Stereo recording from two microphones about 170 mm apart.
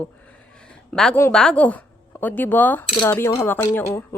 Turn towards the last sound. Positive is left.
turn(degrees=15)  # may be behind; listen again after turning